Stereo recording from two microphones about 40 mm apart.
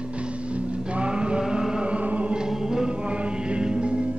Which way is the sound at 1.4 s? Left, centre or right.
Centre.